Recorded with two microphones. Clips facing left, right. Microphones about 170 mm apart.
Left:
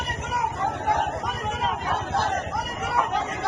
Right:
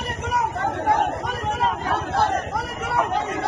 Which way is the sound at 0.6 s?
75° right (ahead or behind).